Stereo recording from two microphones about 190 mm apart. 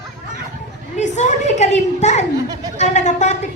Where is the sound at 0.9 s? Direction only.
40° left (ahead or behind).